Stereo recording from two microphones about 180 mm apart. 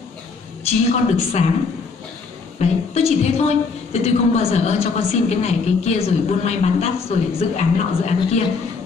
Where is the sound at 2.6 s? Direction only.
35° left (ahead or behind).